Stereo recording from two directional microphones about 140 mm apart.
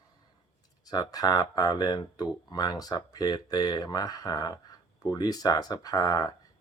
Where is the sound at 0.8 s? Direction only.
30° left (ahead or behind).